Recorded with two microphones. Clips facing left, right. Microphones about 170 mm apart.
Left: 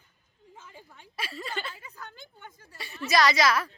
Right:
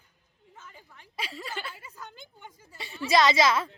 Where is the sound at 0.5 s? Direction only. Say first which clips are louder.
Left 1 dB; 5° left (ahead or behind).